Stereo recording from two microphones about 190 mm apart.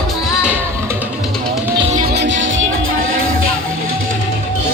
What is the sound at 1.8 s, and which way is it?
Music, 30° right (ahead or behind).